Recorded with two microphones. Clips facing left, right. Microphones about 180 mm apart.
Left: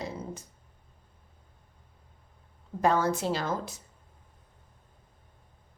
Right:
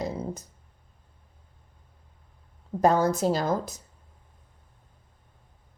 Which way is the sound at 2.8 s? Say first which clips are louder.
Right 4 dB; 40° right (ahead or behind).